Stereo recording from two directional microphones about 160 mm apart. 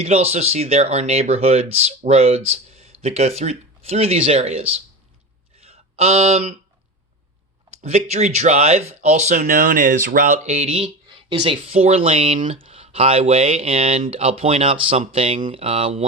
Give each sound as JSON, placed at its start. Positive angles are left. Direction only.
{"t": 0.0, "sound": "speech", "side_deg": -40}
{"t": 5.6, "sound": "a sound", "side_deg": -40}
{"t": 7.8, "sound": "speech", "side_deg": -45}